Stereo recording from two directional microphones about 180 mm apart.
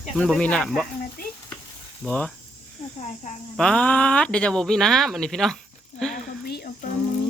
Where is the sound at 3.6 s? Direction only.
5° left (ahead or behind).